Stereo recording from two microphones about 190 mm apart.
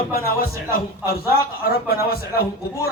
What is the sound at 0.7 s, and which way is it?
Speech, 55° left (ahead or behind).